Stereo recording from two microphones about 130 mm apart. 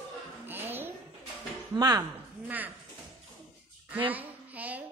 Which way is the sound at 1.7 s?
30° right (ahead or behind).